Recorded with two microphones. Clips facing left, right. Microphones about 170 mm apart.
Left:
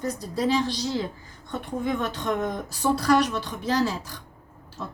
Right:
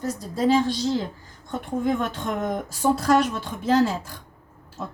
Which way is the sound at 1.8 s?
50° right (ahead or behind).